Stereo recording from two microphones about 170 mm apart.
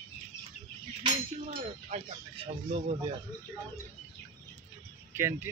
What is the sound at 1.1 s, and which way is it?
Speech, 40° right (ahead or behind).